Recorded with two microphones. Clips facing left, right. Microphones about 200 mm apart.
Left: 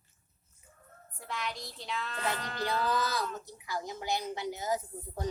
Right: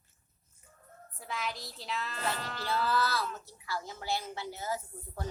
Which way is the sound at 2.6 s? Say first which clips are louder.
Even; 15° left (ahead or behind).